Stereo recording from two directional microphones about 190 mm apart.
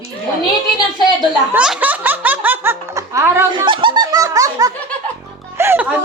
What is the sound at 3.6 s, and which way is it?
Music, 25° right (ahead or behind).